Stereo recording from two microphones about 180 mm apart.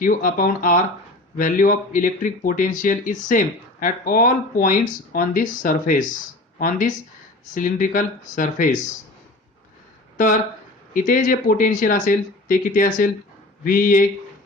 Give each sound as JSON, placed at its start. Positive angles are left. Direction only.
{"t": 0.0, "sound": "speech", "side_deg": 50}
{"t": 10.9, "sound": "speech", "side_deg": 50}